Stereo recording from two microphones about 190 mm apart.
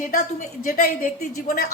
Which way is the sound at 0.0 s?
45° left (ahead or behind).